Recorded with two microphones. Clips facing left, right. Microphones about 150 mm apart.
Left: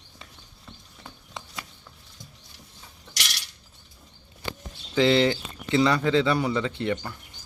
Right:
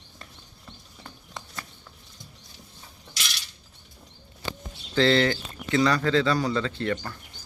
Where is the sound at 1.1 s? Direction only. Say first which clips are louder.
Left 1 dB; 10° left (ahead or behind).